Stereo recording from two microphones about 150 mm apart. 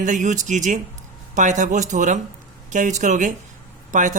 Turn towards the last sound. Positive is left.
turn(degrees=-60)  # may be behind; listen again after turning